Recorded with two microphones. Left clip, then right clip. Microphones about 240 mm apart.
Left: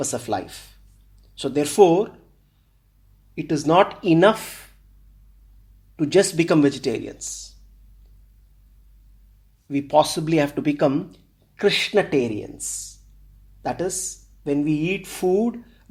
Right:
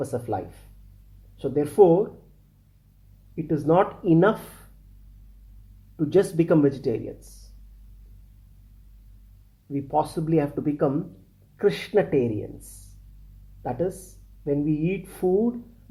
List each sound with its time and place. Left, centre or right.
0.0 s speech: left
3.3 s speech: left
6.0 s speech: left
9.7 s speech: left
13.6 s speech: left